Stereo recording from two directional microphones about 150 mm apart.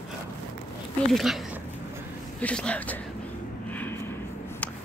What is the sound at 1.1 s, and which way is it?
Speech, centre (ahead or behind).